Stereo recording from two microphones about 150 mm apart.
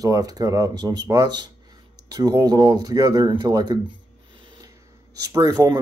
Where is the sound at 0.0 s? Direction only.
25° right (ahead or behind).